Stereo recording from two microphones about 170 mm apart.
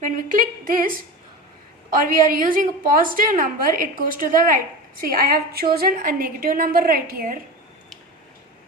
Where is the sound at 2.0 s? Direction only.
50° right (ahead or behind).